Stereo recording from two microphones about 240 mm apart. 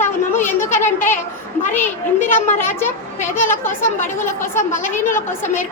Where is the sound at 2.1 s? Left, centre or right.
Left.